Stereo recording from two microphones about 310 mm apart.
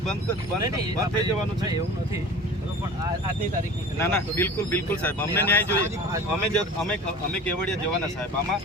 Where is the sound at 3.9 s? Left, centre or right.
Centre.